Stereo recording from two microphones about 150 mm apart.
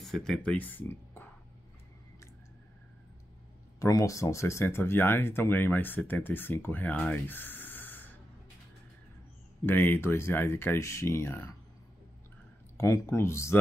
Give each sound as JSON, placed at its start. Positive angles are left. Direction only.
{"t": 0.0, "sound": "speech", "side_deg": 0}
{"t": 3.8, "sound": "speech", "side_deg": 20}
{"t": 9.7, "sound": "speech", "side_deg": 15}
{"t": 12.7, "sound": "speech", "side_deg": 15}